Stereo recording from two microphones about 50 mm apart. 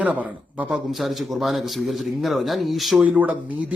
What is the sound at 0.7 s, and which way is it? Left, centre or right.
Speech, centre.